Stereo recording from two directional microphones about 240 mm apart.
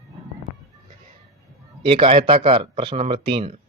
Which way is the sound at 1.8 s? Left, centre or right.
Right.